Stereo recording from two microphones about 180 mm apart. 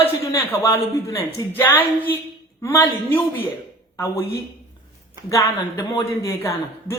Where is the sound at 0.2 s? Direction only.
15° left (ahead or behind).